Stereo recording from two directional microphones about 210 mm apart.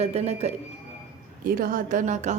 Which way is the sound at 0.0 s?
30° right (ahead or behind).